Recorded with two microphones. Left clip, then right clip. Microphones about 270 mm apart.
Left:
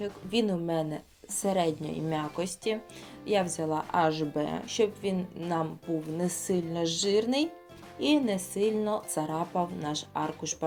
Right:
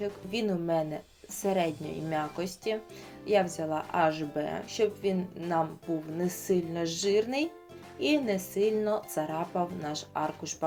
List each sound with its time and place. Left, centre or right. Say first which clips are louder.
0.0 s speech: left 2 dB; centre
6.5 s speech: even; centre